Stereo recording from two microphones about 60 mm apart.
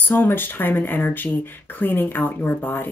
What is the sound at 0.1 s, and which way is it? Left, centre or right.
A woman's voice, left.